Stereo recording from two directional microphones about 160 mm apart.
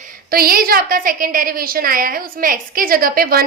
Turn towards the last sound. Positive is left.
turn(degrees=-65)  # may be behind; listen again after turning